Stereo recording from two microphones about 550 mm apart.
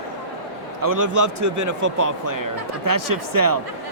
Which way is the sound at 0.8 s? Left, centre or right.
Right.